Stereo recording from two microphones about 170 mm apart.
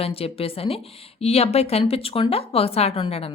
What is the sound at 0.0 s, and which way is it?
A woman's voice, 35° left (ahead or behind).